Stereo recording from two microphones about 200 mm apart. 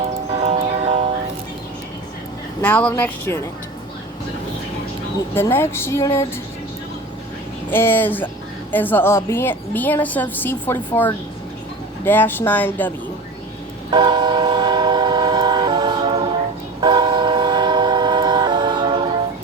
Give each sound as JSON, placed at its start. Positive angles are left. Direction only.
{"t": 0.4, "sound": "music", "side_deg": -30}
{"t": 2.6, "sound": "a woman's voice", "side_deg": 10}
{"t": 5.3, "sound": "a woman's voice", "side_deg": 10}
{"t": 7.7, "sound": "a woman's voice", "side_deg": 10}
{"t": 13.9, "sound": "train", "side_deg": -25}